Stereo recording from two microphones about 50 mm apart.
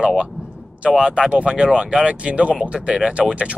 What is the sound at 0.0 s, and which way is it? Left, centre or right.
Speech, centre.